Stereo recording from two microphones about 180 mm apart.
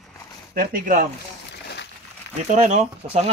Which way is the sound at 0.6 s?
50° right (ahead or behind).